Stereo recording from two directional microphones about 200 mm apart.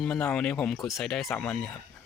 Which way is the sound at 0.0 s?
5° left (ahead or behind).